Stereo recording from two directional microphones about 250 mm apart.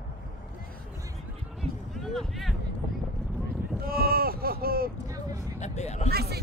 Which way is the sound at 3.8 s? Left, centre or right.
Right.